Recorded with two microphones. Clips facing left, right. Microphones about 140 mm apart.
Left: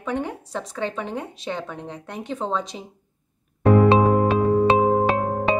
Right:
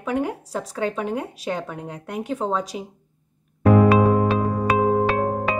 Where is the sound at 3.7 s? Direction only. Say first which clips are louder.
Even; 25° left (ahead or behind).